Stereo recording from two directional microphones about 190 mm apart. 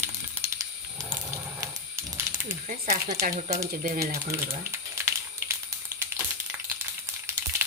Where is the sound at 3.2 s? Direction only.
50° right (ahead or behind).